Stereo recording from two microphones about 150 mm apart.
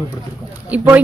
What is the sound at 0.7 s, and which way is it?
Speech, 10° right (ahead or behind).